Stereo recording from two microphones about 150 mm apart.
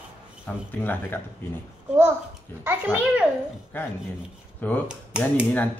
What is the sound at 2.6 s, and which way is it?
Speech, 15° right (ahead or behind).